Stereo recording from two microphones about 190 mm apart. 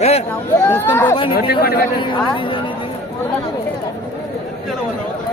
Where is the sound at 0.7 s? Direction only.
10° left (ahead or behind).